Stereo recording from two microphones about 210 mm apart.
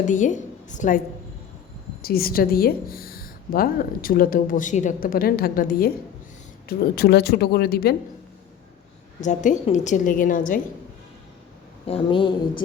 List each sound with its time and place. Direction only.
0.1 s a woman's voice: 35° left (ahead or behind)
9.2 s a woman's voice: 35° left (ahead or behind)
11.9 s a woman's voice: 25° left (ahead or behind)